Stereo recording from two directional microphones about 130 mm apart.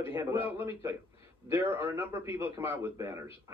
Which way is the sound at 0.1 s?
20° right (ahead or behind).